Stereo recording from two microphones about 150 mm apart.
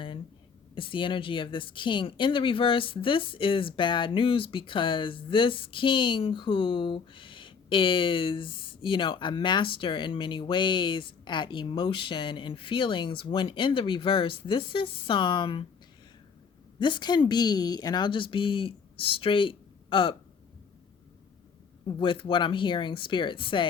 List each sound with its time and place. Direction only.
0.8 s speech: 35° left (ahead or behind)
16.8 s speech: 30° left (ahead or behind)
21.8 s speech: 35° left (ahead or behind)